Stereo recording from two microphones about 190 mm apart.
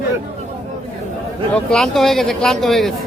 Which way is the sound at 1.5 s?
5° left (ahead or behind).